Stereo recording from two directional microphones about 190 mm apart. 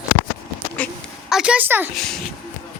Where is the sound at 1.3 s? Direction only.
5° right (ahead or behind).